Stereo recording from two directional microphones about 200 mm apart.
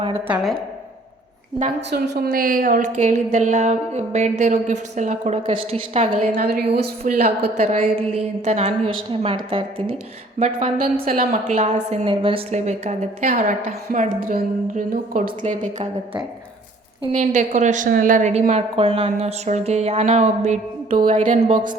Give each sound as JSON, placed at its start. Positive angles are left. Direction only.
{"t": 1.9, "sound": "a woman's voice", "side_deg": -55}
{"t": 6.3, "sound": "a woman's voice", "side_deg": -50}
{"t": 7.5, "sound": "a woman's voice", "side_deg": -35}
{"t": 10.4, "sound": "a woman's voice", "side_deg": -35}
{"t": 17.1, "sound": "a woman's voice", "side_deg": -35}